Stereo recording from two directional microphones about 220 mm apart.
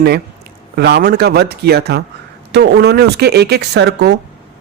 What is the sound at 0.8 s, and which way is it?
A man's voice, 45° right (ahead or behind).